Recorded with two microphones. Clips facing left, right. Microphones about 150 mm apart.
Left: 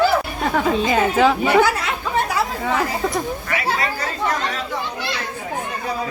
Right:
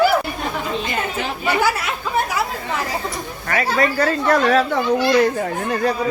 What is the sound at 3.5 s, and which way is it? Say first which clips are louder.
Speech: right 4 dB; 50° right (ahead or behind).